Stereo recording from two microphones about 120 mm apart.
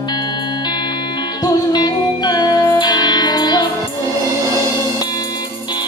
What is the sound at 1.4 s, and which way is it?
Music, 35° left (ahead or behind).